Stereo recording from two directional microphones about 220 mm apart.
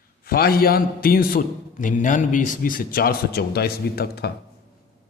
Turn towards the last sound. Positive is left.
turn(degrees=45)  # may be behind; listen again after turning